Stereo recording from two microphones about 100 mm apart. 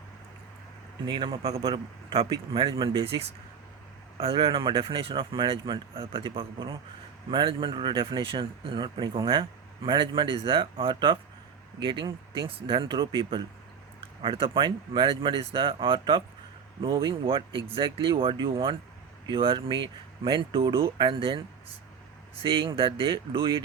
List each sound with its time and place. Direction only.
1.0 s speech: 50° right (ahead or behind)
1.4 s a man's voice: 90° right
1.6 s speech: 50° right (ahead or behind); by 4.4 s 70° right (ahead or behind)
4.4 s speech: 50° right (ahead or behind)